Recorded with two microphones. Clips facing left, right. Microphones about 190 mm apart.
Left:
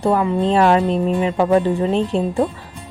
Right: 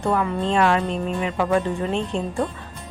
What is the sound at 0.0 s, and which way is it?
A woman's voice, 35° left (ahead or behind).